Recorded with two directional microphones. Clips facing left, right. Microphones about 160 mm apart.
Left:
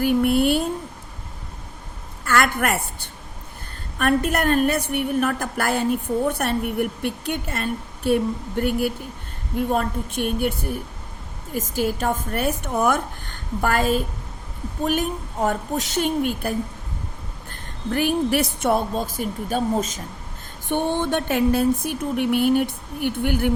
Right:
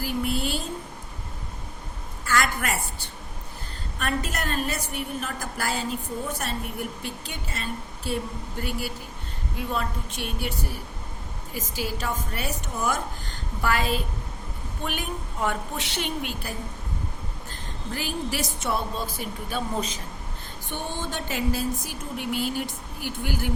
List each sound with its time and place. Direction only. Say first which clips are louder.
0.0 s speech: left 10 dB; 60° left (ahead or behind)
2.2 s a woman's voice: left 5 dB; 60° left (ahead or behind)
20.7 s a woman's voice: left 11 dB; 60° left (ahead or behind)